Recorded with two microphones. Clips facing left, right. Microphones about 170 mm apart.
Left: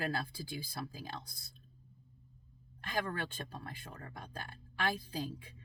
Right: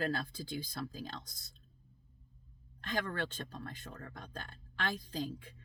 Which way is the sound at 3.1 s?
10° left (ahead or behind).